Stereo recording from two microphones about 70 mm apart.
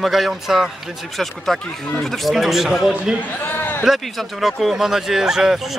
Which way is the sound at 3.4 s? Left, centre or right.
Left.